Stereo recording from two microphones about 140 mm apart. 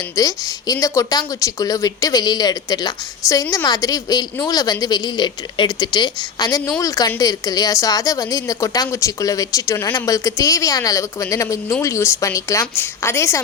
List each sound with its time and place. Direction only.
0.2 s a woman's voice: 25° left (ahead or behind)